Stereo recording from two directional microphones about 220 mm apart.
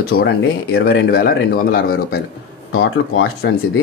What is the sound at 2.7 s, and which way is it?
Speech, 65° left (ahead or behind).